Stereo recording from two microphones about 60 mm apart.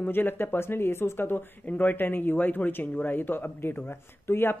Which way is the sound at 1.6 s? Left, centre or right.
Left.